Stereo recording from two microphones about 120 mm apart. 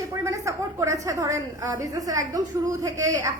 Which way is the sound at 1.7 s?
30° right (ahead or behind).